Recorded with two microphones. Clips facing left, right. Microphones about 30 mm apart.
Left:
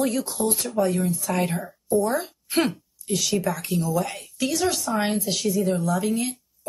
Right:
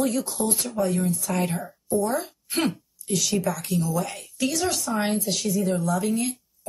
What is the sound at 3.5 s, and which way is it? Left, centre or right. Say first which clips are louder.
Speech: left 1 dB; left.